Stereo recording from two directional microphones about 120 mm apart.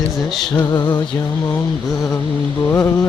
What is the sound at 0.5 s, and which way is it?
Music, 35° left (ahead or behind).